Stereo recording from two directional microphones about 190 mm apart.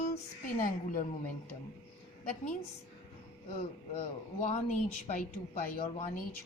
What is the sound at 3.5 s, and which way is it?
Speech, 30° left (ahead or behind).